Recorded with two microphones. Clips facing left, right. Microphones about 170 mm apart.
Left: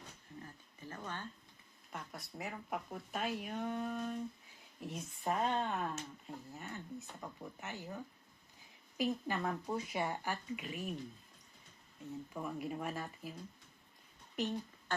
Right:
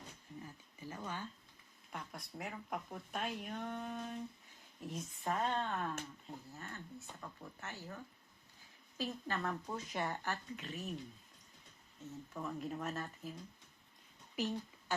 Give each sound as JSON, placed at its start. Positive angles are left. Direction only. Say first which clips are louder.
{"t": 0.4, "sound": "a sound", "louder": "right 1 dB", "side_deg": -10}
{"t": 1.9, "sound": "speech", "louder": "even", "side_deg": 0}
{"t": 4.9, "sound": "speech", "louder": "left 2 dB", "side_deg": 15}
{"t": 12.3, "sound": "speech", "louder": "even", "side_deg": 10}
{"t": 14.3, "sound": "speech", "louder": "left 1 dB", "side_deg": -5}